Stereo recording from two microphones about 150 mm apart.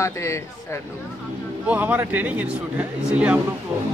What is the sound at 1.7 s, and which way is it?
A man's voice, 10° right (ahead or behind).